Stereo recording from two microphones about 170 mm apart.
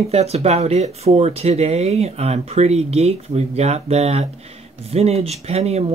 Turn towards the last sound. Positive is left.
turn(degrees=-40)  # may be behind; listen again after turning